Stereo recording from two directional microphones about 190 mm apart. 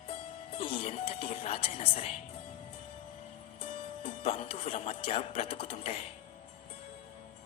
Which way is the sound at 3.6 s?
30° left (ahead or behind).